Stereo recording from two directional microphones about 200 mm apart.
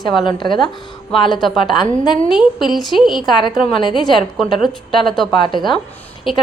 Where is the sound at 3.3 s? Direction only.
20° left (ahead or behind).